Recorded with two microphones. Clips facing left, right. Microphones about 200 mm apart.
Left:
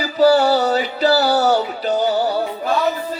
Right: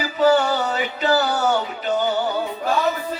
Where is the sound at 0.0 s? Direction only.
35° left (ahead or behind).